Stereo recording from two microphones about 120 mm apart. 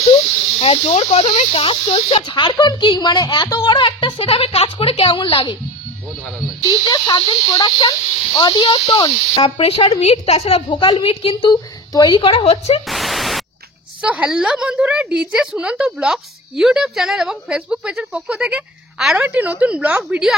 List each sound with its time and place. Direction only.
0.8 s speech: 70° left (ahead or behind)
1.5 s speech: 50° left (ahead or behind)
6.6 s speech: 30° left (ahead or behind); by 12.8 s 55° left (ahead or behind)
12.8 s pink noise: centre (ahead or behind)
14.0 s a woman's voice: 10° right (ahead or behind)
19.1 s a woman's voice: 15° right (ahead or behind)